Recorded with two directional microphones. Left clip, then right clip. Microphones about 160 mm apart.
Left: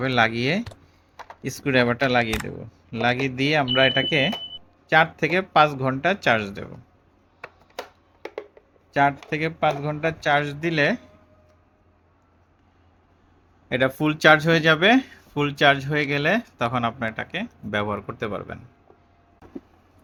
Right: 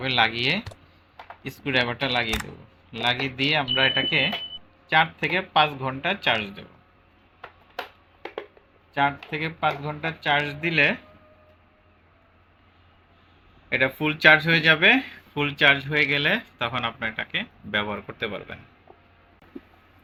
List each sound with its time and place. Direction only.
0.0 s speech: 90° left
1.6 s speech: 85° left
2.3 s speech: centre (ahead or behind)
2.9 s speech: 75° left (ahead or behind)
8.9 s speech: 85° left
10.2 s speech: 90° left
13.7 s speech: 90° left